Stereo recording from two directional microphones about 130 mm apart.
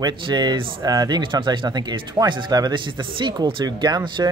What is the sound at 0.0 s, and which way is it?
Speech, 35° right (ahead or behind).